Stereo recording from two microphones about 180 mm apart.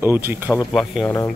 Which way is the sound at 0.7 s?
Centre (ahead or behind).